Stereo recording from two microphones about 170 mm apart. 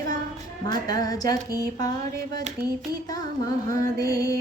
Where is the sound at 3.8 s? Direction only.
20° left (ahead or behind).